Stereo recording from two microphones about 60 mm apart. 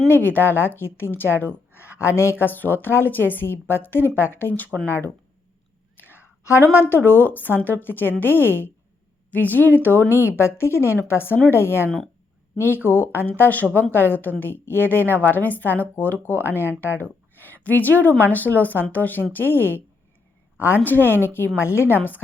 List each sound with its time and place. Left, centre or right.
0.1 s a woman's voice: left
2.4 s a woman's voice: left
6.0 s whispering: left
6.9 s a woman's voice: left
10.2 s a woman's voice: left